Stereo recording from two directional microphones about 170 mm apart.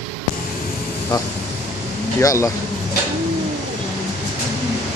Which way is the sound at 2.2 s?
20° left (ahead or behind).